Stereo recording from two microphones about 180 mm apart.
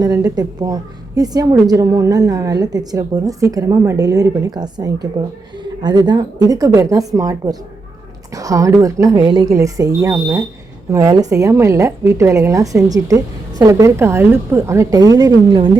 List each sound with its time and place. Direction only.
0.0 s a woman's voice: 20° right (ahead or behind)